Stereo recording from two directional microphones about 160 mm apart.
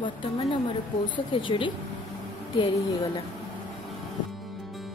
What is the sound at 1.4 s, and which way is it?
Speech, 30° left (ahead or behind).